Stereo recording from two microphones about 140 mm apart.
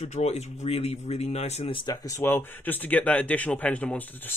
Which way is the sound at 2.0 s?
15° left (ahead or behind).